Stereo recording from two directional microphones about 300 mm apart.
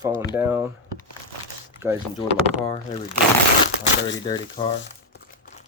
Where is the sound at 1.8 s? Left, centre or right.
Centre.